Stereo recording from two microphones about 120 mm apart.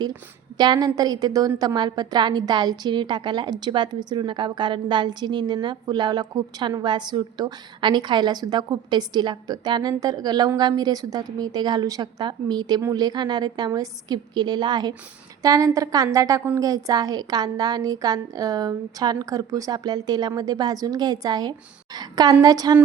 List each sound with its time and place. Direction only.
0.5 s a woman's voice: 35° right (ahead or behind)